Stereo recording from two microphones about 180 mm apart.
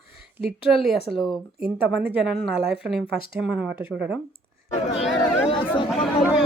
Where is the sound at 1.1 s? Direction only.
Centre (ahead or behind).